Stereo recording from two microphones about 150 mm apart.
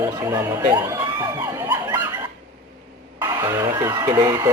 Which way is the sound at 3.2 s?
20° right (ahead or behind).